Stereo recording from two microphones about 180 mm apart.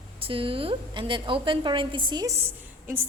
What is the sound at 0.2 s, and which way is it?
A woman's voice, 30° right (ahead or behind).